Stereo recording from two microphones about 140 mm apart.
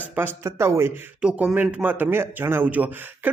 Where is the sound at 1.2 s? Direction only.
10° right (ahead or behind).